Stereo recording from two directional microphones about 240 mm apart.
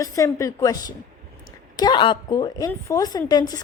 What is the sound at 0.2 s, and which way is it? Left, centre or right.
A woman's voice, centre.